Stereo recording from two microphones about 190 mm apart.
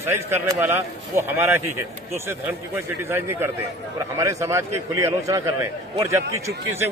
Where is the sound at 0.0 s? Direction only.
15° right (ahead or behind).